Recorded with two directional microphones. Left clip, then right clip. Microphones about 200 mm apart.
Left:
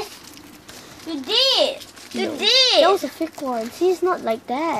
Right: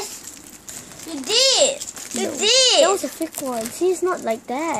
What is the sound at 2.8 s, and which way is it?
A woman's voice, centre (ahead or behind).